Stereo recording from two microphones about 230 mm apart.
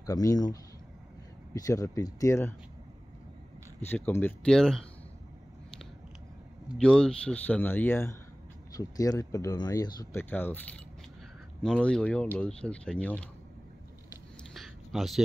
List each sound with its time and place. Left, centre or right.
0.0 s speech: centre
3.8 s speech: centre
6.7 s speech: centre
11.6 s speech: centre
14.5 s a sound: centre